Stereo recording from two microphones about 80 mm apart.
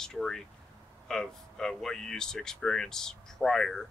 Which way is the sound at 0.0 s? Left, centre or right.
Centre.